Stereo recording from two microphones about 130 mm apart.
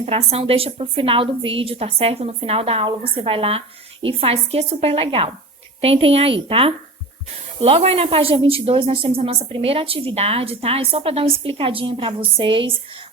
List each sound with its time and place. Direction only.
0.0 s a woman's voice: 50° right (ahead or behind)